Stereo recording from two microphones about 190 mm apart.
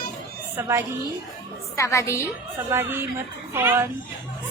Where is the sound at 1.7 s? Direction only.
15° left (ahead or behind).